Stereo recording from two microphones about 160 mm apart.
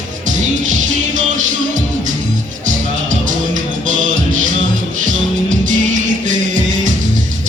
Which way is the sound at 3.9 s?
55° right (ahead or behind).